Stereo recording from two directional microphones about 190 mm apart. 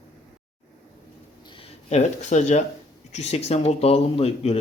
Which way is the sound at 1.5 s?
35° left (ahead or behind).